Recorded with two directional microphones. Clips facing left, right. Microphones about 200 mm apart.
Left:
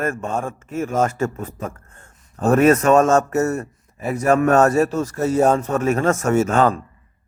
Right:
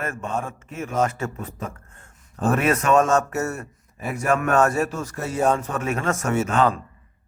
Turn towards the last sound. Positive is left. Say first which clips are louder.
# left 4 dB
turn(degrees=45)  # may be behind; listen again after turning